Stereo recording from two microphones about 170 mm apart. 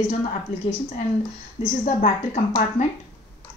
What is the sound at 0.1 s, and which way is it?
Speech, 40° left (ahead or behind).